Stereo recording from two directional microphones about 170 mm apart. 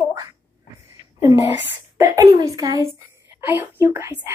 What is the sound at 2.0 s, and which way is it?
Speech, 20° right (ahead or behind).